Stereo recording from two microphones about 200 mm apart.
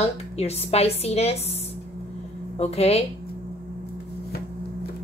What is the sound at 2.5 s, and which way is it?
Speech, 30° left (ahead or behind).